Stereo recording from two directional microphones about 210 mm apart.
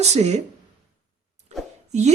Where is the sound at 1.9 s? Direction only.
30° right (ahead or behind).